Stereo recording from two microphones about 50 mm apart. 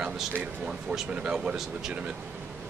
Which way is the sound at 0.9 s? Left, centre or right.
Centre.